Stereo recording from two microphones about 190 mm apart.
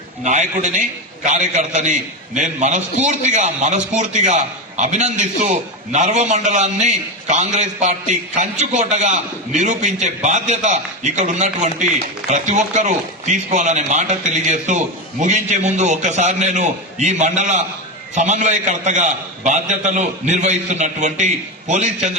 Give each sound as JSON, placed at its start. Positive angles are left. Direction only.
{"t": 0.3, "sound": "a man's voice", "side_deg": -40}